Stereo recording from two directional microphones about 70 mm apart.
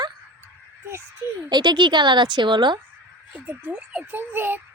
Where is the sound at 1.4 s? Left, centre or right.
Right.